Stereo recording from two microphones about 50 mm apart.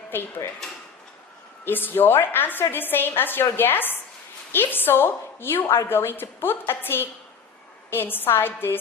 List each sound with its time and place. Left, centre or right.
0.1 s a woman's voice: left
1.6 s a woman's voice: left